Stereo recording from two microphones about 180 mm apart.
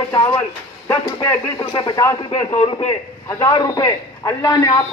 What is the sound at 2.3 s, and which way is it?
A man's voice, 30° left (ahead or behind).